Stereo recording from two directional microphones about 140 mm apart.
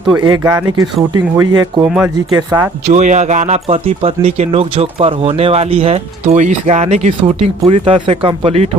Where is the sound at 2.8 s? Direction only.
55° right (ahead or behind).